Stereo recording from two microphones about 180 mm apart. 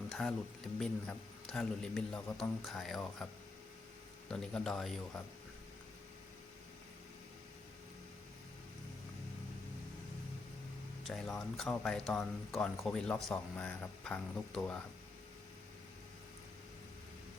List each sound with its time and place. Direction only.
0.1 s speech: 5° left (ahead or behind)
4.3 s speech: 5° left (ahead or behind)
11.0 s speech: centre (ahead or behind)